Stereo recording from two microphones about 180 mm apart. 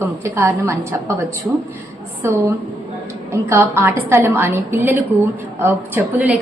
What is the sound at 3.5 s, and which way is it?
A woman's voice, 15° right (ahead or behind).